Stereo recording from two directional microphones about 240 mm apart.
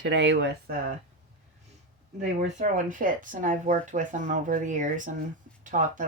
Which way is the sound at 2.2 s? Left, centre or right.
Right.